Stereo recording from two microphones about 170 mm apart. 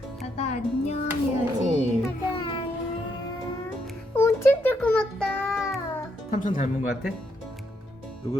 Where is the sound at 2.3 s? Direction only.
30° left (ahead or behind).